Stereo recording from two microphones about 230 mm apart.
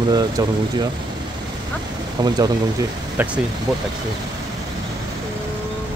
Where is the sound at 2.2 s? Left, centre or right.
Centre.